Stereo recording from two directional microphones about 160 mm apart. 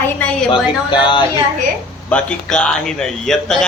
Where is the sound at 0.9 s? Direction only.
30° left (ahead or behind).